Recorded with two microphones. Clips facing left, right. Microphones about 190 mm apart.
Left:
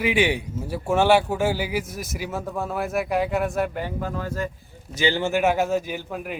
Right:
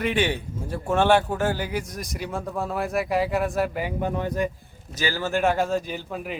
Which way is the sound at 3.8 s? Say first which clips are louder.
Right 2 dB; 20° right (ahead or behind).